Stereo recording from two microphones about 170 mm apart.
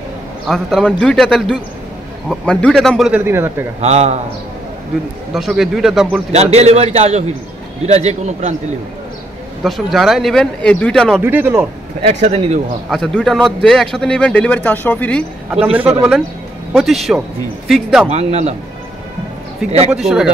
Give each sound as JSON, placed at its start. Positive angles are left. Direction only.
{"t": 0.5, "sound": "a man's voice", "side_deg": 0}
{"t": 3.3, "sound": "speech", "side_deg": -15}
{"t": 3.8, "sound": "a man's voice", "side_deg": -40}
{"t": 5.3, "sound": "a man's voice", "side_deg": -5}
{"t": 6.3, "sound": "a man's voice", "side_deg": -40}
{"t": 9.6, "sound": "a man's voice", "side_deg": 0}
{"t": 11.1, "sound": "speech", "side_deg": -10}
{"t": 12.0, "sound": "a man's voice", "side_deg": -40}
{"t": 12.9, "sound": "a man's voice", "side_deg": 5}
{"t": 15.8, "sound": "speech", "side_deg": -15}
{"t": 16.7, "sound": "a man's voice", "side_deg": 0}
{"t": 18.1, "sound": "a man's voice", "side_deg": -40}
{"t": 19.9, "sound": "a man's voice", "side_deg": 0}